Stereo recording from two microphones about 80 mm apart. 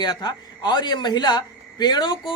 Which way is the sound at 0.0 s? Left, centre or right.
Left.